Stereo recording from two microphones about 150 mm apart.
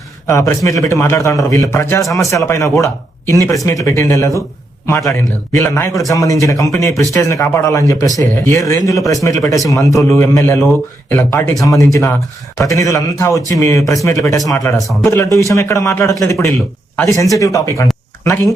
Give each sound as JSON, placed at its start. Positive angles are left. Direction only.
{"t": 0.3, "sound": "a man's voice", "side_deg": 20}